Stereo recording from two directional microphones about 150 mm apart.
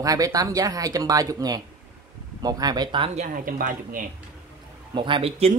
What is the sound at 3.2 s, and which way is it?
Speech, 65° right (ahead or behind).